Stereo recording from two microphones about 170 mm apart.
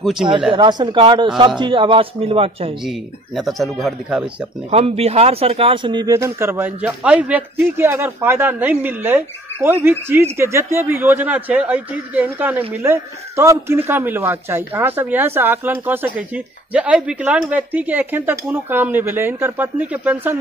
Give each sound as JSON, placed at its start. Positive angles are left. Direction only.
{"t": 0.0, "sound": "speech", "side_deg": 0}
{"t": 0.5, "sound": "speech", "side_deg": -25}
{"t": 2.8, "sound": "speech", "side_deg": 0}
{"t": 4.6, "sound": "speech", "side_deg": -35}